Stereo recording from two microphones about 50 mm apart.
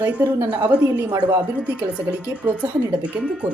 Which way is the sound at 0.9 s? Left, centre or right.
Right.